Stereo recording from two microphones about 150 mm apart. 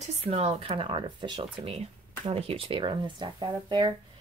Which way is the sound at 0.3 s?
45° right (ahead or behind).